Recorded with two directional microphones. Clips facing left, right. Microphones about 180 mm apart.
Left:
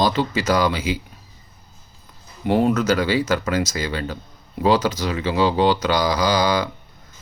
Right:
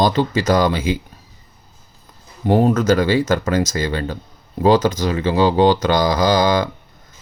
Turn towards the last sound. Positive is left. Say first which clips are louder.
# right 4 dB
turn(degrees=-50)  # may be behind; listen again after turning